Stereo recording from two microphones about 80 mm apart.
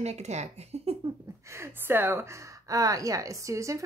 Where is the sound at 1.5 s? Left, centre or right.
Right.